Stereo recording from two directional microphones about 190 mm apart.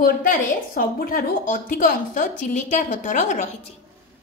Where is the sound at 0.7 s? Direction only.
50° left (ahead or behind).